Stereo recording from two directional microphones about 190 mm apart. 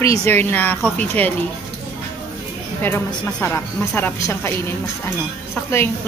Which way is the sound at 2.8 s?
15° left (ahead or behind).